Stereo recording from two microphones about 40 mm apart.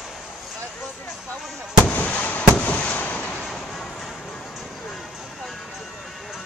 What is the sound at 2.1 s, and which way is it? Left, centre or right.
Fireworks, left.